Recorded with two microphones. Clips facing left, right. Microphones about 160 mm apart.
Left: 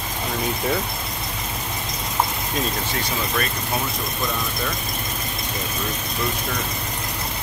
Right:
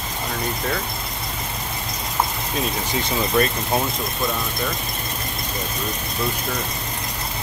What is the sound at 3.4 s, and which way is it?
Speech, 30° right (ahead or behind).